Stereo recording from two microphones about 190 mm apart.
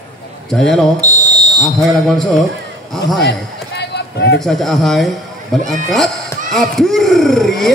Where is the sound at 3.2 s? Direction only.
60° left (ahead or behind).